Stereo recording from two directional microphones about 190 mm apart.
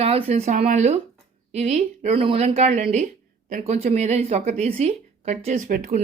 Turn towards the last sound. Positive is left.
turn(degrees=-50)  # may be behind; listen again after turning